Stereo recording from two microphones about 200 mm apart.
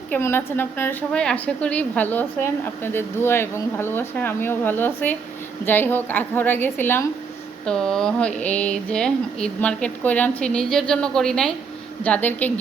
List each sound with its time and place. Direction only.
0.1 s speech: 10° left (ahead or behind)